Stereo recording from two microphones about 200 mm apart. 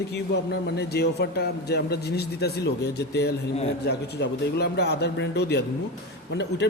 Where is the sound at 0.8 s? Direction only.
55° left (ahead or behind).